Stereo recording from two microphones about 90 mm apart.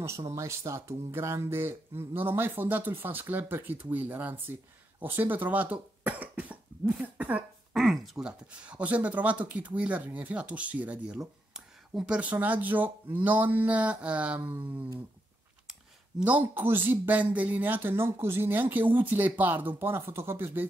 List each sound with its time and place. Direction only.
0.3 s speech: 35° right (ahead or behind); by 7.4 s 15° right (ahead or behind)
7.7 s speech: centre (ahead or behind); by 14.7 s 20° right (ahead or behind)
16.2 s speech: 15° right (ahead or behind)